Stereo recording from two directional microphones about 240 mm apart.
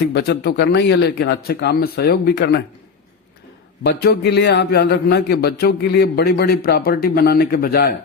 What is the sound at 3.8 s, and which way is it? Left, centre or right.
A man's voice, left.